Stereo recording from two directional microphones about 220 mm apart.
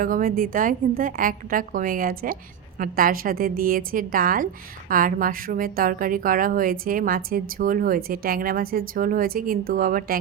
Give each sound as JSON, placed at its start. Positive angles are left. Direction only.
{"t": 0.0, "sound": "a woman's voice", "side_deg": -40}